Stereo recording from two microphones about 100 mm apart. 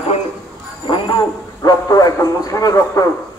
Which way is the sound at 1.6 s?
40° left (ahead or behind).